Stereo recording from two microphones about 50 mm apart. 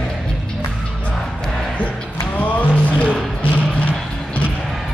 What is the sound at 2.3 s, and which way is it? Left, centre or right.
Music, left.